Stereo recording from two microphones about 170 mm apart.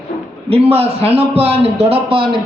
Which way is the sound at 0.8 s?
35° right (ahead or behind).